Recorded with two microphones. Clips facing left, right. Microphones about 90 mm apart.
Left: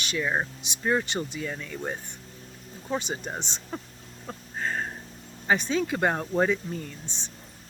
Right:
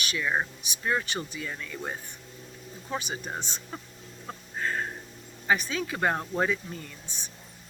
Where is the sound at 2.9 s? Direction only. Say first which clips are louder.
Left 3 dB; 25° left (ahead or behind).